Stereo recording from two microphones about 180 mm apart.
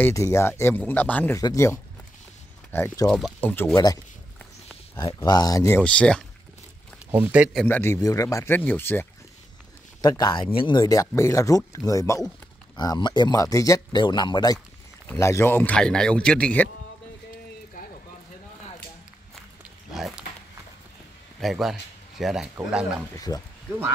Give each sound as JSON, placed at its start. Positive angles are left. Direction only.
{"t": 0.0, "sound": "a man's voice", "side_deg": 15}
{"t": 5.8, "sound": "speech", "side_deg": 5}
{"t": 7.1, "sound": "speech", "side_deg": -10}
{"t": 7.6, "sound": "a man's voice", "side_deg": 10}
{"t": 10.0, "sound": "a man's voice", "side_deg": 20}
{"t": 19.3, "sound": "a sound", "side_deg": 0}
{"t": 21.4, "sound": "speech", "side_deg": 0}
{"t": 23.1, "sound": "speech", "side_deg": 20}